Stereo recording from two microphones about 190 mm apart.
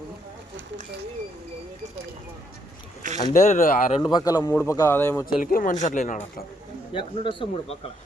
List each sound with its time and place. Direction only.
3.3 s speech: 40° left (ahead or behind)
4.0 s a man's voice: 20° left (ahead or behind)
5.2 s speech: 50° left (ahead or behind)
6.9 s speech: 25° left (ahead or behind)